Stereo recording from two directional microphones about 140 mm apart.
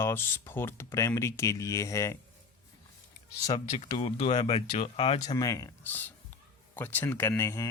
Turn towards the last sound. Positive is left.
turn(degrees=20)  # may be behind; listen again after turning